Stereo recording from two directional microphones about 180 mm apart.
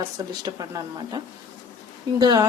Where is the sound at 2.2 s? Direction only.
20° right (ahead or behind).